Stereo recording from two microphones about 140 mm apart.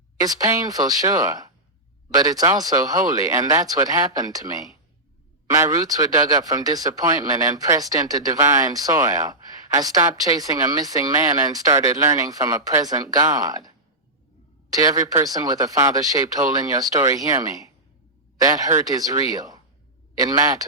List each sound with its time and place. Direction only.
0.2 s speech: 25° right (ahead or behind)
5.5 s speech: 25° right (ahead or behind)
14.8 s speech: 25° right (ahead or behind)